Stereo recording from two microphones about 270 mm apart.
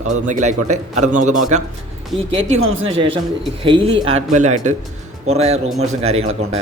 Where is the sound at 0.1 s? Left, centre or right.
Right.